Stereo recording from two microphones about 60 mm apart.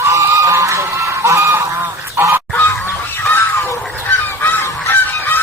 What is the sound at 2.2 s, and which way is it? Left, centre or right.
Goose, right.